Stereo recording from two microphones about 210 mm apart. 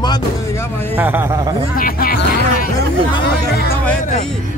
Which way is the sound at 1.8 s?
45° left (ahead or behind).